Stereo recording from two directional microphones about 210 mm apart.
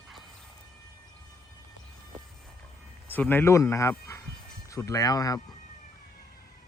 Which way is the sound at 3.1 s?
10° left (ahead or behind).